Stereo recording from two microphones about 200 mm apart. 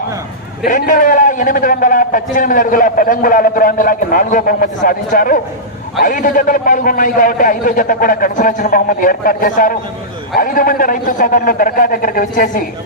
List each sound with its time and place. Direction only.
0.6 s a man's voice: 40° left (ahead or behind)